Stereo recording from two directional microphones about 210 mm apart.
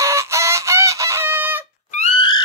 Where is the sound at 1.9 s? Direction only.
30° left (ahead or behind).